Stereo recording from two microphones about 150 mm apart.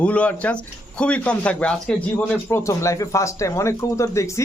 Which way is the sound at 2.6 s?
20° left (ahead or behind).